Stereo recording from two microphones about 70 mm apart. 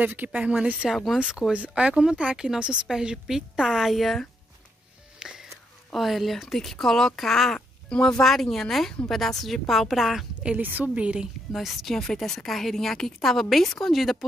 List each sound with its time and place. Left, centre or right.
0.0 s speech: right; by 4.3 s centre
5.2 s music: centre
5.9 s speech: centre
10.4 s speech: right
11.5 s speech: centre